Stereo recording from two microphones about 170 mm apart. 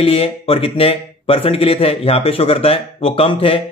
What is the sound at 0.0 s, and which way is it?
Speech, 35° left (ahead or behind).